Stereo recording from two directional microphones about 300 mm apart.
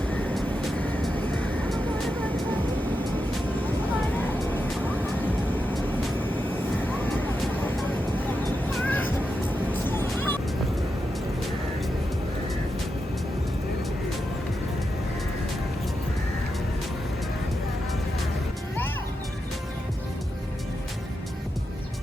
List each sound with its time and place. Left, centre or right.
0.1 s vehicle: centre
8.8 s music: centre